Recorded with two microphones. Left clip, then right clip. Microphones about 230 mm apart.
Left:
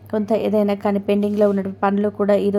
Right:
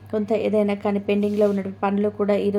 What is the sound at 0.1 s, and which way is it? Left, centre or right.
A woman's voice, centre.